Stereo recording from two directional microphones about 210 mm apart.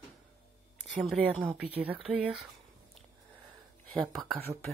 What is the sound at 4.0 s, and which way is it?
Speech, centre (ahead or behind).